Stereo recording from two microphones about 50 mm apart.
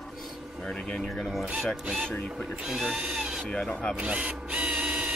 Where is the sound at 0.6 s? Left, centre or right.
Centre.